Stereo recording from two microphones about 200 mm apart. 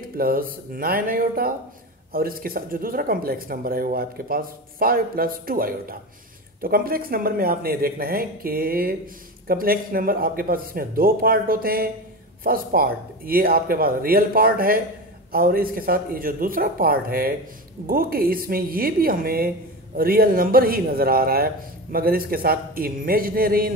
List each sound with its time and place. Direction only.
0.2 s speech: 45° right (ahead or behind)